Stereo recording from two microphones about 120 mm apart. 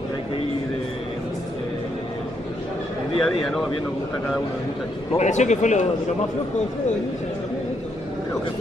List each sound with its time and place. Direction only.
3.2 s speech: 5° left (ahead or behind)
5.1 s speech: 75° left (ahead or behind)